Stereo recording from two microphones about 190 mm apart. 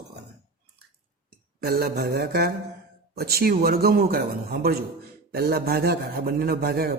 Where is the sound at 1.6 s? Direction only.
55° right (ahead or behind).